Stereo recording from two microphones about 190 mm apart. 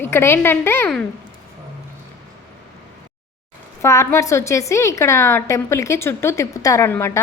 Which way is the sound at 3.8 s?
15° left (ahead or behind).